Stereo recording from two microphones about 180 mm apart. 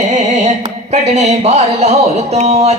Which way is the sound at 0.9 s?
40° right (ahead or behind).